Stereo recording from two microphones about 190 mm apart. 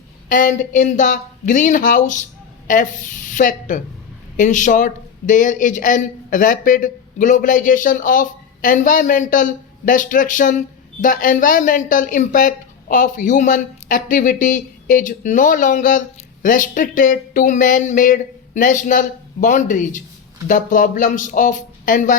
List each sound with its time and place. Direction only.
0.3 s a woman's voice: 45° left (ahead or behind)